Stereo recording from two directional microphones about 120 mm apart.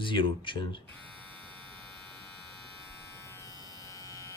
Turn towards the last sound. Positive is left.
turn(degrees=30)  # may be behind; listen again after turning